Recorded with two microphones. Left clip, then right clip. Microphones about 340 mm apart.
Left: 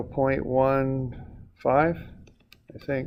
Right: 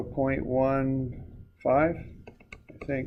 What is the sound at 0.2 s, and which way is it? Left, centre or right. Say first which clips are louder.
Speech: left 4 dB; left.